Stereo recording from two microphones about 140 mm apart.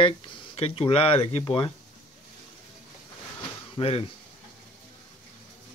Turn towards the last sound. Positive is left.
turn(degrees=45)  # may be behind; listen again after turning